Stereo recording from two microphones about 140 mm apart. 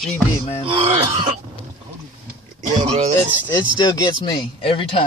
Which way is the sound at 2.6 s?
55° right (ahead or behind).